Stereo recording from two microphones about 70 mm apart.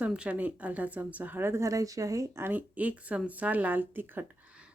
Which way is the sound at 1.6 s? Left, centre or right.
Right.